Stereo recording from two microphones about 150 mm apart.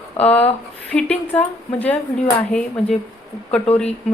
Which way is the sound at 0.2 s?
10° left (ahead or behind).